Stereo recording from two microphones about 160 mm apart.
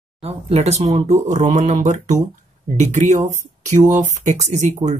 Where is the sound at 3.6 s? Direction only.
50° right (ahead or behind).